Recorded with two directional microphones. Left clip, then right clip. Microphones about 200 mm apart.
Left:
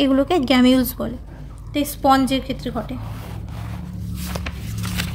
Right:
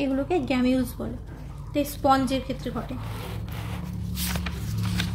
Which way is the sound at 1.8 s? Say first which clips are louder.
Left 5 dB; 25° left (ahead or behind).